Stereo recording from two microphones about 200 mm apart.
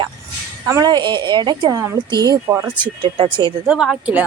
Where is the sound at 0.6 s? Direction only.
15° right (ahead or behind).